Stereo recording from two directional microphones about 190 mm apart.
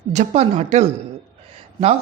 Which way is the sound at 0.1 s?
35° right (ahead or behind).